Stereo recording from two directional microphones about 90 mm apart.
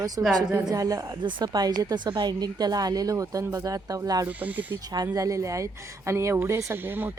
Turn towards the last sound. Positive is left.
turn(degrees=-30)  # may be behind; listen again after turning